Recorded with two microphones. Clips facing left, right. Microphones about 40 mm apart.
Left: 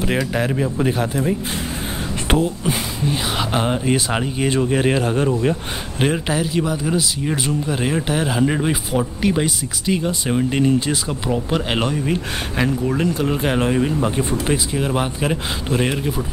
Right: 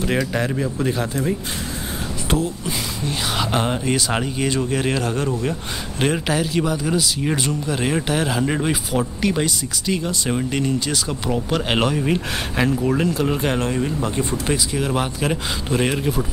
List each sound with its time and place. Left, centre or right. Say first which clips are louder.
0.0 s speech: left 1 dB; centre
3.1 s speech: left 1 dB; centre
5.9 s speech: left 1 dB; centre
11.1 s speech: left 1 dB; centre
11.7 s speech: right 4 dB; centre
13.6 s speech: left 4 dB; centre